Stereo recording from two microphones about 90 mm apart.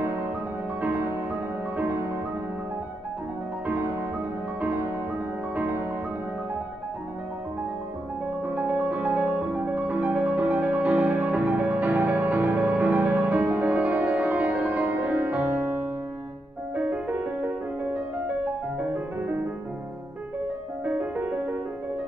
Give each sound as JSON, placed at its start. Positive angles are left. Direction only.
{"t": 5.6, "sound": "music", "side_deg": -20}
{"t": 8.5, "sound": "music", "side_deg": -15}
{"t": 20.8, "sound": "music", "side_deg": -15}